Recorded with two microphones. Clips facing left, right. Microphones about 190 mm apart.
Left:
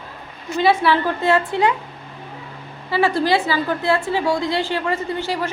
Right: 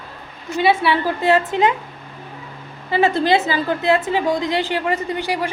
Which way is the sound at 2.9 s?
20° right (ahead or behind).